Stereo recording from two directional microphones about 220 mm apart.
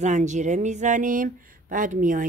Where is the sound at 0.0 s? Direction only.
30° right (ahead or behind).